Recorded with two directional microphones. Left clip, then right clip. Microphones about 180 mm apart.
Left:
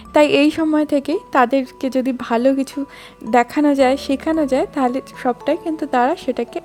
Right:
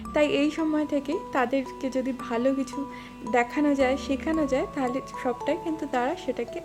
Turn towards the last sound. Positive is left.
turn(degrees=45)  # may be behind; listen again after turning